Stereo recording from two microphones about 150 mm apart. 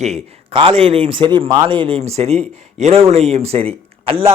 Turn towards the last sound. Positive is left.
turn(degrees=-40)  # may be behind; listen again after turning